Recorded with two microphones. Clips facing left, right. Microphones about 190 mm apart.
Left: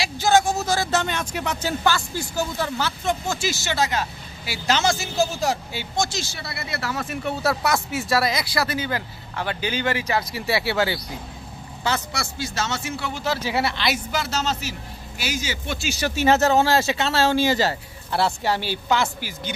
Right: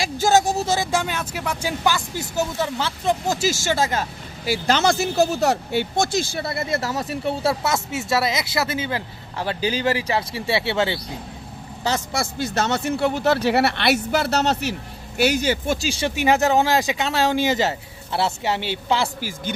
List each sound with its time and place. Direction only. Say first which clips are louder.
0.0 s speech: right 1 dB; 45° right (ahead or behind)
0.7 s speech: right 1 dB; 15° right (ahead or behind)
3.3 s speech: right 4 dB; 40° right (ahead or behind); by 11.0 s 25° right (ahead or behind)
11.8 s speech: right 3 dB; 45° right (ahead or behind)
16.2 s speech: left 1 dB; 15° right (ahead or behind)